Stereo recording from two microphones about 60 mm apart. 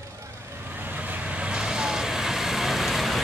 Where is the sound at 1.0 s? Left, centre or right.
Right.